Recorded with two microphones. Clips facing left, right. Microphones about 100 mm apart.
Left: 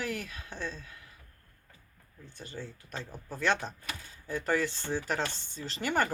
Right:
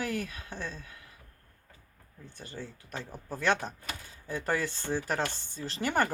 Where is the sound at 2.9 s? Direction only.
10° right (ahead or behind).